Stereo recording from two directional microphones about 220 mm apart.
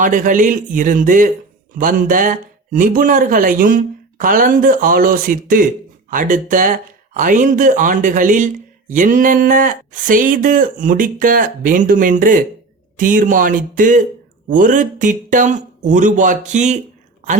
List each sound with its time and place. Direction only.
0.0 s speech: 35° right (ahead or behind)